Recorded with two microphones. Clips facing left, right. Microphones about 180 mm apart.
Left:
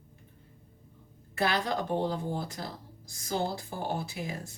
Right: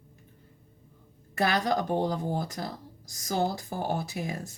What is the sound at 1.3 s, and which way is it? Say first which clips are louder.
A woman's voice: right 3 dB; 45° right (ahead or behind).